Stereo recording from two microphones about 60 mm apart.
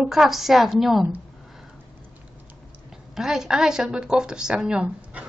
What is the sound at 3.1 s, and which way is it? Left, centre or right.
Speech, centre.